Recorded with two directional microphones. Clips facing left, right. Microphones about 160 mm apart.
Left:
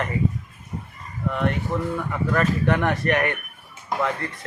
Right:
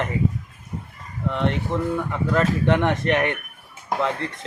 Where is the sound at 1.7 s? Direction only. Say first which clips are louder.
Right 2 dB; 25° right (ahead or behind).